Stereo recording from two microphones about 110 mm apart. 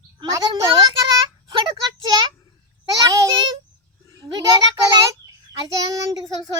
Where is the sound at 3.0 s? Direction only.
30° right (ahead or behind).